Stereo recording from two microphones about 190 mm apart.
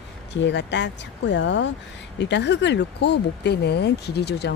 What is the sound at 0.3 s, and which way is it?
Speech, 65° left (ahead or behind).